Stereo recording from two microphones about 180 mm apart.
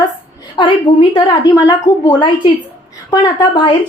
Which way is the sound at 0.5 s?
25° left (ahead or behind).